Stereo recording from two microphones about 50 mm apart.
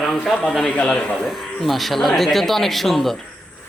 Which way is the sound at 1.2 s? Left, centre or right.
Centre.